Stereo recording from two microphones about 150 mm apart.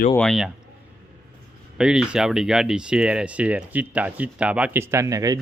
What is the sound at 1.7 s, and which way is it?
Speech, 5° right (ahead or behind).